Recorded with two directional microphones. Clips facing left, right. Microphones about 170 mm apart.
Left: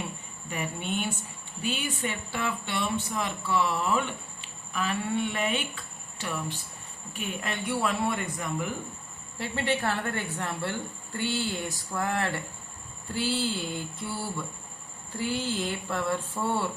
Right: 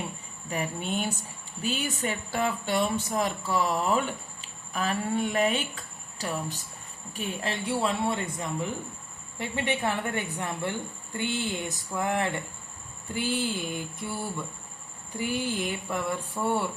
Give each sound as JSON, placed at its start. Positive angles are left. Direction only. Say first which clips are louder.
{"t": 0.5, "sound": "a woman's voice", "louder": "right 2 dB", "side_deg": -40}